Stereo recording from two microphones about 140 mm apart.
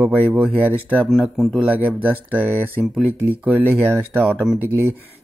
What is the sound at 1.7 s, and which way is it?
Speech, 10° right (ahead or behind).